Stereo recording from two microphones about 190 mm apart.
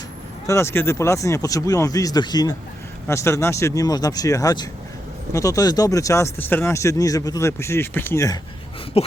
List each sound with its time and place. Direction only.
0.4 s speech: 15° left (ahead or behind)
8.9 s speech: 30° left (ahead or behind)